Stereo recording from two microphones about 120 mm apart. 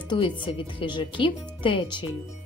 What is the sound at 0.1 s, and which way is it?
Speech, 45° left (ahead or behind).